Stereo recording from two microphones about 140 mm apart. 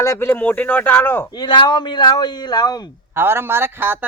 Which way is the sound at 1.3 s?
30° left (ahead or behind).